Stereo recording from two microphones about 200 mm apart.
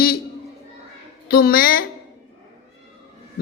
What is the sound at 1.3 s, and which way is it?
Speech, 50° left (ahead or behind).